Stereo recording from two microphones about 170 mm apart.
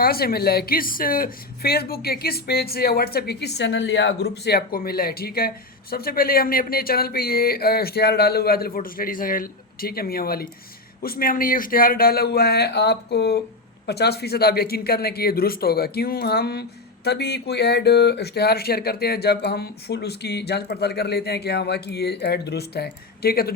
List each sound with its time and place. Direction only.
0.0 s a woman's voice: 60° left (ahead or behind)